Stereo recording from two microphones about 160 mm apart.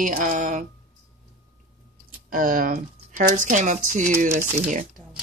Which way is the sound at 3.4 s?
50° right (ahead or behind).